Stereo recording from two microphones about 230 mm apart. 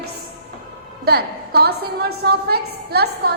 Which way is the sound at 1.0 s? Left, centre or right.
Right.